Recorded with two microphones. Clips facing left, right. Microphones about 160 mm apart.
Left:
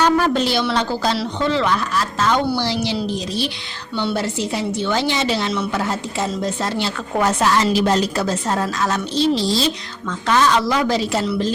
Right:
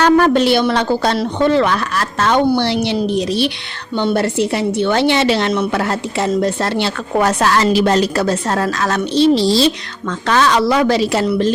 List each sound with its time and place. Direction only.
0.0 s a woman's voice: 65° right (ahead or behind)
3.9 s a woman's voice: 55° right (ahead or behind)